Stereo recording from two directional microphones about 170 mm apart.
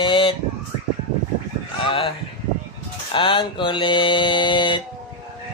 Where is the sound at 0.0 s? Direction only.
30° left (ahead or behind).